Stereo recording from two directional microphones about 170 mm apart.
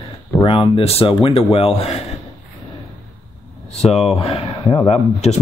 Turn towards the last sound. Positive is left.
turn(degrees=40)  # may be behind; listen again after turning